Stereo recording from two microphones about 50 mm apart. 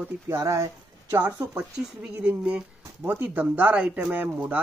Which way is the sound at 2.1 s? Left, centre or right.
Right.